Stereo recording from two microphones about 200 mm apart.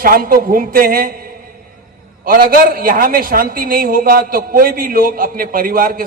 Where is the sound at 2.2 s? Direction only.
45° right (ahead or behind).